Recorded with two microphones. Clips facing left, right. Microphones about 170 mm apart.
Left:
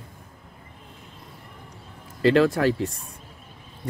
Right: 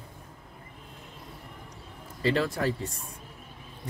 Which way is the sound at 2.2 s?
80° left.